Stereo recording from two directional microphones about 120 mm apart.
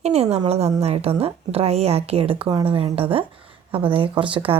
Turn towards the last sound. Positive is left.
turn(degrees=-45)  # may be behind; listen again after turning